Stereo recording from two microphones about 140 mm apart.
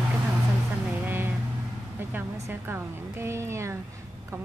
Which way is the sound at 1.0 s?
15° right (ahead or behind).